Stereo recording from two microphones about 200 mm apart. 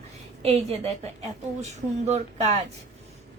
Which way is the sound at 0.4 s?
30° right (ahead or behind).